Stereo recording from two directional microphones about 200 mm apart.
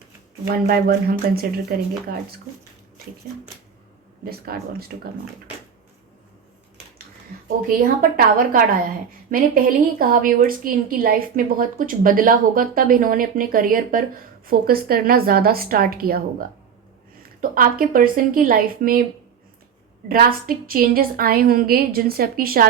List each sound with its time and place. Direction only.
0.5 s a woman's voice: 50° right (ahead or behind)
4.3 s a woman's voice: 50° right (ahead or behind)
7.8 s a woman's voice: 45° right (ahead or behind)
17.4 s a woman's voice: 45° right (ahead or behind)
20.1 s a woman's voice: 45° right (ahead or behind)